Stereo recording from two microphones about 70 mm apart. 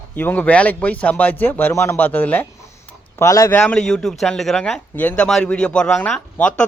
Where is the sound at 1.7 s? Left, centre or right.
Left.